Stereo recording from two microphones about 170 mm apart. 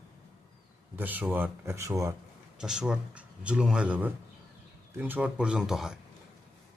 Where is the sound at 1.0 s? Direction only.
10° right (ahead or behind).